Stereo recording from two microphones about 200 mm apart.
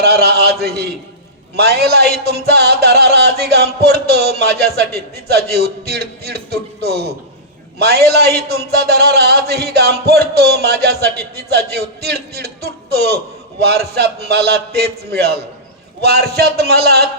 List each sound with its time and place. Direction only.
0.0 s music: 55° right (ahead or behind)